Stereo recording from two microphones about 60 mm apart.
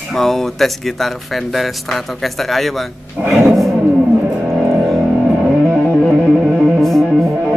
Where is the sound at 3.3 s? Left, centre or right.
Centre.